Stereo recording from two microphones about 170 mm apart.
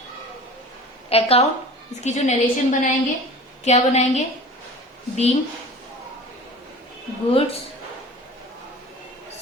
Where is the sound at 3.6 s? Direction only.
40° left (ahead or behind).